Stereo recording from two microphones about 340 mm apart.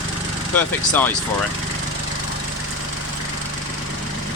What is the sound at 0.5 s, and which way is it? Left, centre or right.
Speech, centre.